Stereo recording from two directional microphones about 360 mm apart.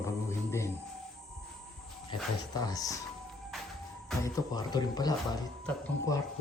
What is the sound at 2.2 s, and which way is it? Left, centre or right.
Speech, centre.